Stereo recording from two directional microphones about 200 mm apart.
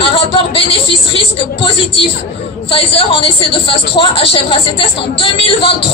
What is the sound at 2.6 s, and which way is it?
A woman's voice, 25° left (ahead or behind).